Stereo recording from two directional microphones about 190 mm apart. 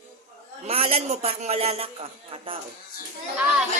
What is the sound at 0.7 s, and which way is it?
Speech, 30° right (ahead or behind).